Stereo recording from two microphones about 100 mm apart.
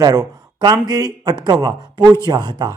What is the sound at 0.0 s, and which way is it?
Speech, 40° right (ahead or behind).